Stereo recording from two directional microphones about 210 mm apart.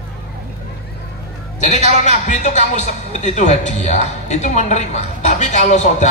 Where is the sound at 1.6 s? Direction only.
35° left (ahead or behind).